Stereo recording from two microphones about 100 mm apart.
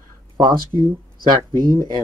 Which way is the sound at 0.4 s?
45° right (ahead or behind).